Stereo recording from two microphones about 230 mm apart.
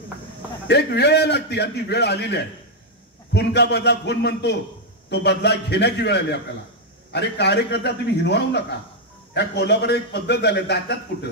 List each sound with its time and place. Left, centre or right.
0.7 s a man's voice: left